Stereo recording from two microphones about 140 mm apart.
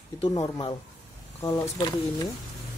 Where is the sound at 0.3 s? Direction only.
30° left (ahead or behind).